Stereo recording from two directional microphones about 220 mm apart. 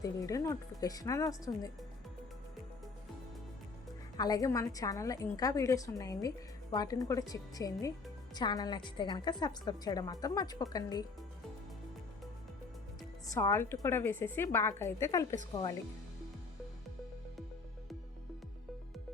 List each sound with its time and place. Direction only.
0.0 s a woman's voice: 15° left (ahead or behind)
4.2 s a woman's voice: 15° left (ahead or behind)
13.3 s a woman's voice: 15° left (ahead or behind)